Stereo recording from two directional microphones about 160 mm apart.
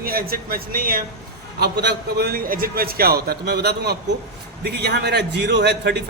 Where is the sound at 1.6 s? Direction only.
90° right.